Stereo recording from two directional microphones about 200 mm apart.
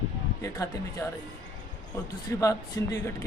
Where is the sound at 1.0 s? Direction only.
5° left (ahead or behind).